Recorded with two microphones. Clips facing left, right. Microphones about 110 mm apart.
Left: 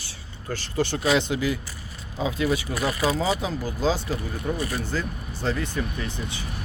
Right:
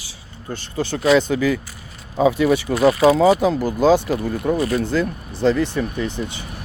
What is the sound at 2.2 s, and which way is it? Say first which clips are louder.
Speech: right 9 dB; 65° right (ahead or behind).